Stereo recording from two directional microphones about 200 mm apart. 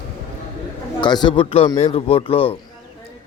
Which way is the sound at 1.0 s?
20° left (ahead or behind).